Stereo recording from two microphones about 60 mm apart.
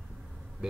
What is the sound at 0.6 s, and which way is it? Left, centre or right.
Speech, centre.